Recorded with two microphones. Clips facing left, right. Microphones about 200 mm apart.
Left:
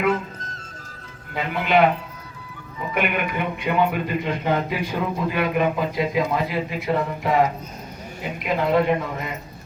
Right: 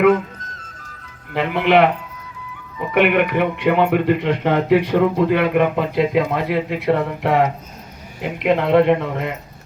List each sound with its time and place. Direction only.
1.3 s speech: 70° right (ahead or behind)
2.9 s speech: 70° right (ahead or behind)